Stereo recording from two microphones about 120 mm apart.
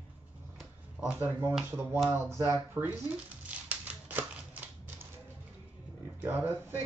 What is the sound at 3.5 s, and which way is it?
Typewriter, 10° right (ahead or behind).